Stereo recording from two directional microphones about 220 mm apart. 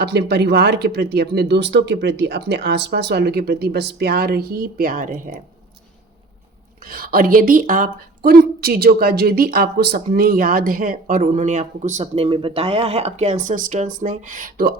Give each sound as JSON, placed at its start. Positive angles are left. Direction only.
{"t": 0.0, "sound": "speech", "side_deg": -50}
{"t": 6.8, "sound": "speech", "side_deg": -40}